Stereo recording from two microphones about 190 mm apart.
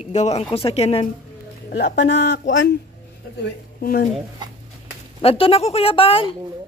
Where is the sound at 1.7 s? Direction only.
60° left (ahead or behind).